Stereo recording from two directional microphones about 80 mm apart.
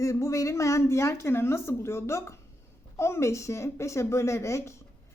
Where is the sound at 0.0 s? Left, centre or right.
Left.